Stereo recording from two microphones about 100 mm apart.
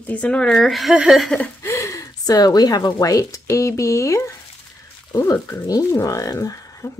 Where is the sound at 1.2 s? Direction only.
10° left (ahead or behind).